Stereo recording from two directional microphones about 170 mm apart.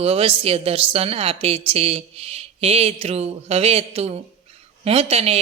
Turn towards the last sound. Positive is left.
turn(degrees=-35)  # may be behind; listen again after turning